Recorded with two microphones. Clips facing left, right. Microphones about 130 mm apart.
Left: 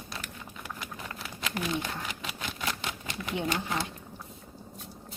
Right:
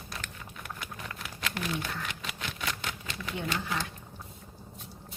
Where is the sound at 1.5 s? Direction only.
15° left (ahead or behind).